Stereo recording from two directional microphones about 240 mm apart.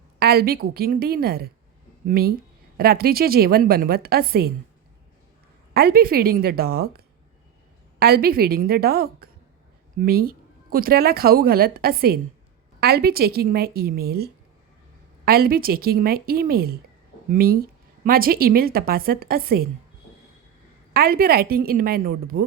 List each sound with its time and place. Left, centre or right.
0.2 s speech: right
5.7 s speech: right
20.9 s speech: right